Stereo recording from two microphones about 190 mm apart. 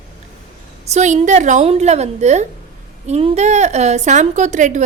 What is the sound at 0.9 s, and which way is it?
A woman's voice, 40° right (ahead or behind).